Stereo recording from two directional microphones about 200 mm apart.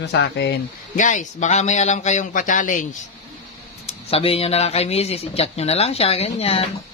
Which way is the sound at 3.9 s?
30° left (ahead or behind).